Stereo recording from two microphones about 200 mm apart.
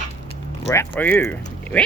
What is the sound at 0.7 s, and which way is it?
Speech, 10° left (ahead or behind).